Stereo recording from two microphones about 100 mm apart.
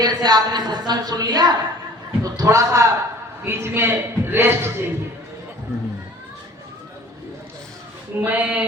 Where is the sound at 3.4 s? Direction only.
25° right (ahead or behind).